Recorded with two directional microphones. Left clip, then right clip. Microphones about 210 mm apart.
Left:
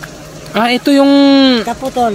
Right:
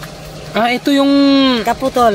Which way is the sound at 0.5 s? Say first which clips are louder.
Left 3 dB; 20° left (ahead or behind).